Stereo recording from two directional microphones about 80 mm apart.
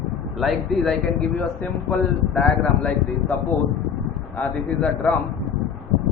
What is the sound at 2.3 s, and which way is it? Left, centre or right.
Speech, centre.